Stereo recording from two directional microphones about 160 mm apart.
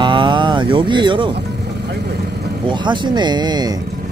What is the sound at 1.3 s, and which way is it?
Vehicle, 90° right.